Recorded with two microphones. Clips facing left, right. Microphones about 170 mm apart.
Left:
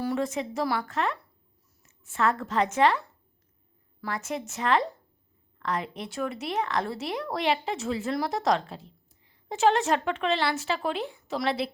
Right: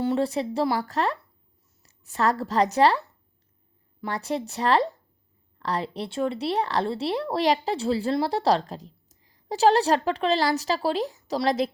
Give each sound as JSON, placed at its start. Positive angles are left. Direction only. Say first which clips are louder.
{"t": 0.0, "sound": "a woman's voice", "louder": "right 4 dB", "side_deg": -30}
{"t": 4.0, "sound": "speech", "louder": "right 4 dB", "side_deg": -35}